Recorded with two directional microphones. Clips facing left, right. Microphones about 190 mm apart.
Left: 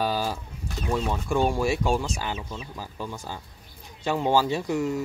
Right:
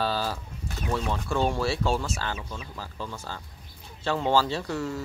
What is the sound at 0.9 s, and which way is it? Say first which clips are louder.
Speech: left 3 dB; 15° left (ahead or behind).